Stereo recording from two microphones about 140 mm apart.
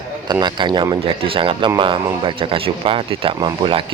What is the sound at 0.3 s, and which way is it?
Speech, 30° right (ahead or behind).